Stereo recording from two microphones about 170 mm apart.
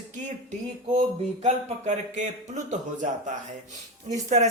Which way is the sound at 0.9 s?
40° right (ahead or behind).